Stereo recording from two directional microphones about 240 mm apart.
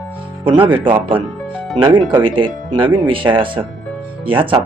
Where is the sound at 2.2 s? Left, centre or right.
Right.